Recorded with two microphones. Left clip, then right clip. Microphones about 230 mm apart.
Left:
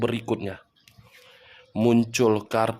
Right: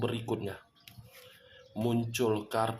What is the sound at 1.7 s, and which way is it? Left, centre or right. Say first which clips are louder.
Speech: left 11 dB; left.